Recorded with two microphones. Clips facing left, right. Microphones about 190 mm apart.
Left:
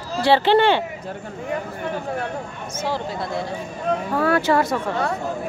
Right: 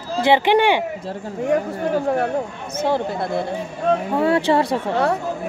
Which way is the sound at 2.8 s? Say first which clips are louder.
Right 5 dB; 55° right (ahead or behind).